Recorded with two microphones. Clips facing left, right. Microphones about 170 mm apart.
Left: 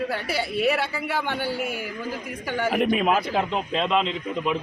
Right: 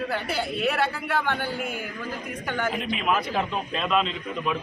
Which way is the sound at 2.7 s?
55° left (ahead or behind).